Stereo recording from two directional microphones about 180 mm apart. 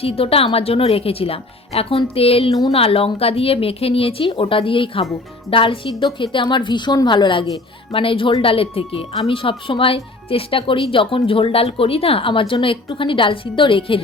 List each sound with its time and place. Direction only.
0.0 s a woman's voice: 30° left (ahead or behind)